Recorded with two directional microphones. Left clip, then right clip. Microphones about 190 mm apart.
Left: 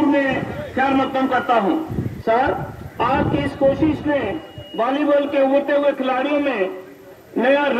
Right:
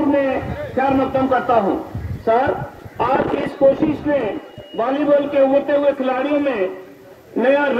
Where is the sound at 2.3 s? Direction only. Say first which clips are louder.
Right 1 dB; 35° right (ahead or behind).